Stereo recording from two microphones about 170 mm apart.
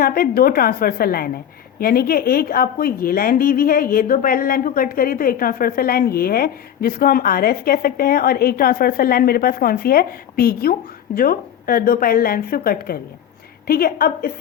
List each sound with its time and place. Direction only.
0.0 s a woman's voice: 60° left (ahead or behind)